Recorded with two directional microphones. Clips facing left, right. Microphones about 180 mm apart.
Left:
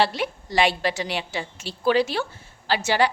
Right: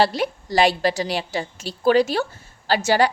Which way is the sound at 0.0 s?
40° right (ahead or behind).